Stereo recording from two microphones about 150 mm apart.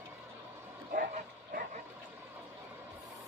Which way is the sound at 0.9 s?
80° right.